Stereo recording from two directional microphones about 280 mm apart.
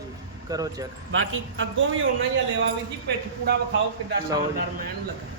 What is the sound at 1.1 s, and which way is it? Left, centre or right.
Speech, right.